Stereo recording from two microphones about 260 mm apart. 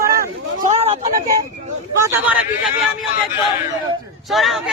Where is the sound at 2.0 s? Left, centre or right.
Centre.